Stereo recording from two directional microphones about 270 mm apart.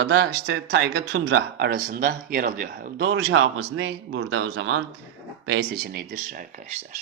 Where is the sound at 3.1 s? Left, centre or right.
Right.